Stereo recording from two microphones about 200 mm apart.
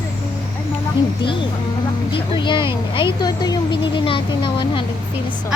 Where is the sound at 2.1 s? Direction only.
25° left (ahead or behind).